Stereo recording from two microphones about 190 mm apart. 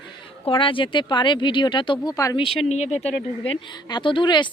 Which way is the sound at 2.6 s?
35° left (ahead or behind).